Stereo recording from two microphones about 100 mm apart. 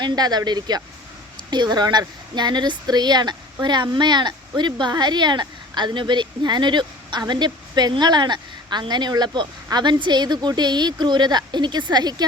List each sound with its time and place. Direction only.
0.0 s speech: 45° right (ahead or behind)